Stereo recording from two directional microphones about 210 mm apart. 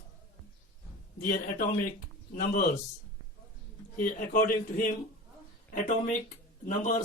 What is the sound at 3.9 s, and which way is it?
A man's voice, 40° left (ahead or behind).